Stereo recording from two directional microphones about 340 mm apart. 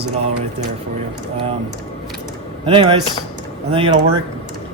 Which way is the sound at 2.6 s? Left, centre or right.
Centre.